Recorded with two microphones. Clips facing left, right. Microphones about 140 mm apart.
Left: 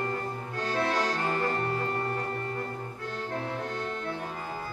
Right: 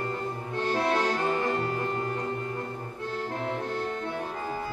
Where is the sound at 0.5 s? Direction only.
25° right (ahead or behind).